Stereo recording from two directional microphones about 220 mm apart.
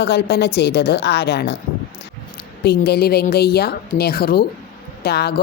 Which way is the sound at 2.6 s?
45° left (ahead or behind).